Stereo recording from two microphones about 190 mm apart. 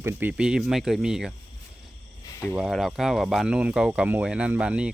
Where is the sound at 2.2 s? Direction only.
15° left (ahead or behind).